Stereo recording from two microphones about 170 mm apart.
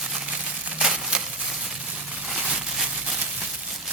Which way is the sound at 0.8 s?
5° right (ahead or behind).